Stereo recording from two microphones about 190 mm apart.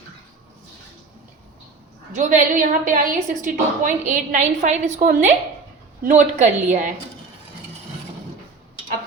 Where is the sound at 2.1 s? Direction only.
40° right (ahead or behind).